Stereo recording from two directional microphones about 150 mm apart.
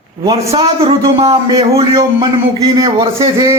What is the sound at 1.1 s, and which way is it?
Speech, 40° right (ahead or behind).